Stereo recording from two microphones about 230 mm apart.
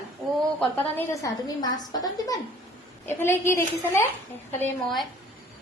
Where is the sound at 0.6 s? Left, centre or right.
Centre.